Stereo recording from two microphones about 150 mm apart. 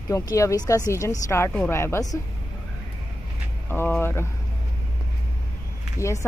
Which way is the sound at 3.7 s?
15° left (ahead or behind).